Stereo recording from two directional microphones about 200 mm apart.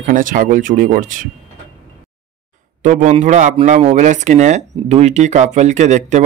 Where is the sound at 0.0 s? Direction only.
40° right (ahead or behind).